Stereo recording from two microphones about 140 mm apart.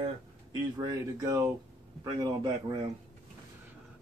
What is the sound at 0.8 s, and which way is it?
Speech, 25° right (ahead or behind).